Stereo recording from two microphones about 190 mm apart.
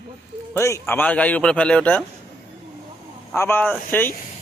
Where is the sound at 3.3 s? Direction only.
10° left (ahead or behind).